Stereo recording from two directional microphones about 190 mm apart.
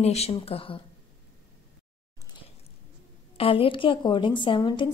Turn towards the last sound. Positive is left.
turn(degrees=25)  # may be behind; listen again after turning